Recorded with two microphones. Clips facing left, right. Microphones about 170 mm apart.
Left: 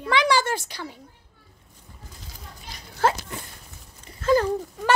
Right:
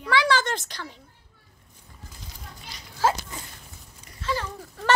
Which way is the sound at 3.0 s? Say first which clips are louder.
Left 1 dB; 60° left (ahead or behind).